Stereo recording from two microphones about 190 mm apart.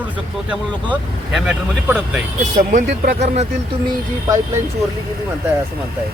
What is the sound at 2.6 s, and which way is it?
Speech, 45° right (ahead or behind).